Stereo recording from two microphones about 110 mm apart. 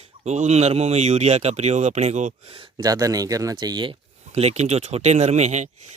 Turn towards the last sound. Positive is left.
turn(degrees=-90)